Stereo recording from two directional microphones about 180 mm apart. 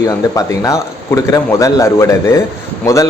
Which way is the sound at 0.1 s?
20° left (ahead or behind).